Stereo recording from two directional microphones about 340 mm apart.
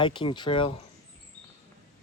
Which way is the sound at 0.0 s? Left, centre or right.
Centre.